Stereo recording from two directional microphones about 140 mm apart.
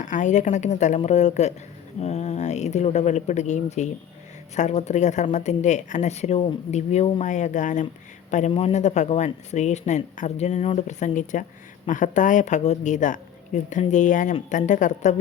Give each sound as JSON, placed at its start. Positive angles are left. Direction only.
{"t": 0.0, "sound": "a man's voice", "side_deg": 65}